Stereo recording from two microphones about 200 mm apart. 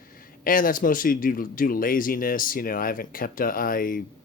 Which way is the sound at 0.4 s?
45° left (ahead or behind).